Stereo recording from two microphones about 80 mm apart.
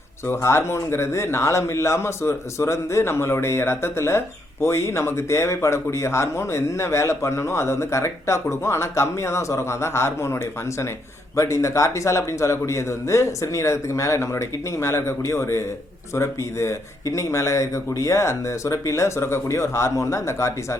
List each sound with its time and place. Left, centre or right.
0.3 s speech: left